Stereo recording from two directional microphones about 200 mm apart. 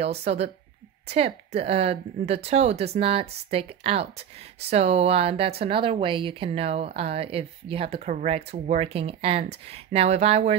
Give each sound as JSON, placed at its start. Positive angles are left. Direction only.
{"t": 0.0, "sound": "speech", "side_deg": -30}